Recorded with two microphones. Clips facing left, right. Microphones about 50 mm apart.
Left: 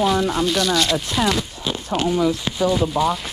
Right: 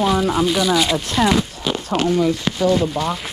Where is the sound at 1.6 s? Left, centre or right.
Right.